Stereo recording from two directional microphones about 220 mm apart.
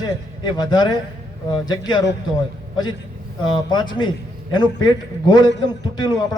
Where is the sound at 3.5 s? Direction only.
20° left (ahead or behind).